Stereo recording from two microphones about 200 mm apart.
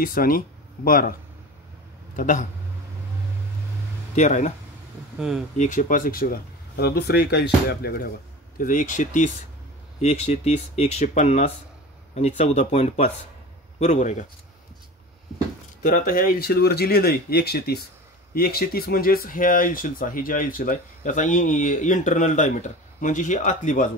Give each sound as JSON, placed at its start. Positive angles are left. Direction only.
{"t": 0.0, "sound": "speech", "side_deg": 45}
{"t": 2.1, "sound": "speech", "side_deg": 40}
{"t": 4.1, "sound": "speech", "side_deg": 35}
{"t": 5.2, "sound": "speech", "side_deg": -5}
{"t": 5.6, "sound": "speech", "side_deg": 40}
{"t": 8.5, "sound": "speech", "side_deg": 40}
{"t": 15.8, "sound": "speech", "side_deg": 40}